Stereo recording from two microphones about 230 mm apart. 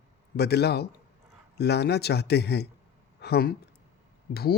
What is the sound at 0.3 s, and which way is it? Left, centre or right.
Speech, left.